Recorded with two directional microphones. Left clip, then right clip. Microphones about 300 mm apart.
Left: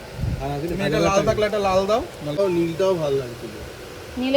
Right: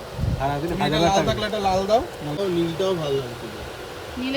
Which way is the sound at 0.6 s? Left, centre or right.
Centre.